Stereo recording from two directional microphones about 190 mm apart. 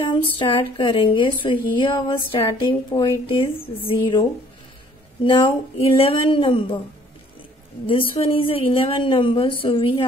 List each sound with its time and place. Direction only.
0.0 s speech: 25° left (ahead or behind)
7.8 s speech: 30° left (ahead or behind)